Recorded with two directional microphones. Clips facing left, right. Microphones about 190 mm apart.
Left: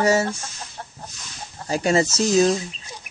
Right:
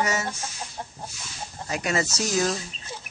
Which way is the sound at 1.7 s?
30° left (ahead or behind).